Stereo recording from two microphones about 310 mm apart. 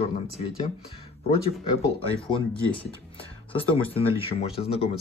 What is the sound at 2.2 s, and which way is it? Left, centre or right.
Speech, centre.